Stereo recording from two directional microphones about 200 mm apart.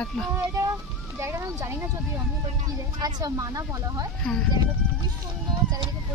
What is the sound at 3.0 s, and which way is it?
Speech, 20° right (ahead or behind).